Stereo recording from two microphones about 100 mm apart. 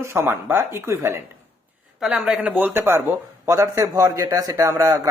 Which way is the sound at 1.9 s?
5° right (ahead or behind).